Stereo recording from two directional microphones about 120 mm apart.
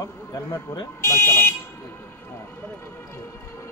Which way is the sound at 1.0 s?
20° left (ahead or behind).